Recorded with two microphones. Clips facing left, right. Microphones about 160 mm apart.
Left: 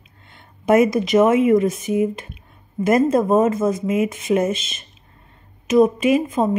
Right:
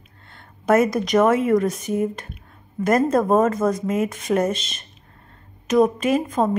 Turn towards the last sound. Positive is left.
turn(degrees=10)  # may be behind; listen again after turning